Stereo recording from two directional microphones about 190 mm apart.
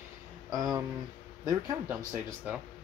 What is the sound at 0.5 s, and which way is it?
Speech, 20° right (ahead or behind).